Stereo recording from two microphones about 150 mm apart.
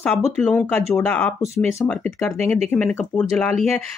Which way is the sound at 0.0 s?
5° left (ahead or behind).